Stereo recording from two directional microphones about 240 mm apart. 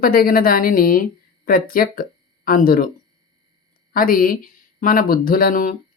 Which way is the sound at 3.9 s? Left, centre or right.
Left.